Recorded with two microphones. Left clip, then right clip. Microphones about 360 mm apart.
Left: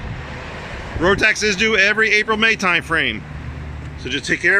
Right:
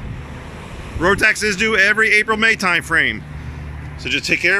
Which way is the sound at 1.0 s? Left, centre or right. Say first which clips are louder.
Right 1 dB; centre.